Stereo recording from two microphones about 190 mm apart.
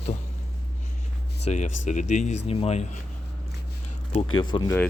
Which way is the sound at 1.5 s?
40° left (ahead or behind).